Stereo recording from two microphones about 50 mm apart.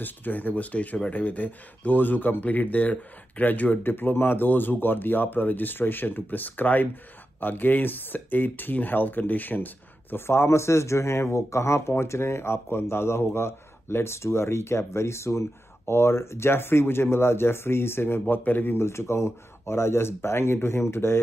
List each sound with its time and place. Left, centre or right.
0.0 s speech: left
3.8 s speech: left
10.1 s speech: left
11.9 s speech: left
18.3 s speech: left
18.8 s speech: left